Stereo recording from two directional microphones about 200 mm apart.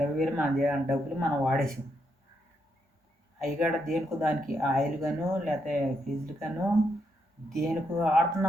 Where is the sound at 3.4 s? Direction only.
Centre (ahead or behind).